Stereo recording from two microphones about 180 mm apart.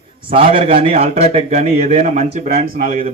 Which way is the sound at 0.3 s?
30° right (ahead or behind).